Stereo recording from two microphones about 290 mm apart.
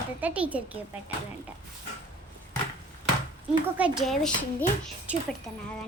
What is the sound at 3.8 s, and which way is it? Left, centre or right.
A child's voice, centre.